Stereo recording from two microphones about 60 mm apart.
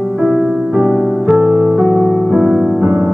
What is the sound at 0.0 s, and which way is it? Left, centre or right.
Music, right.